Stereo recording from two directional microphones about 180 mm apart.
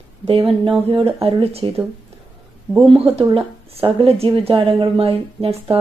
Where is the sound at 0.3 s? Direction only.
30° right (ahead or behind).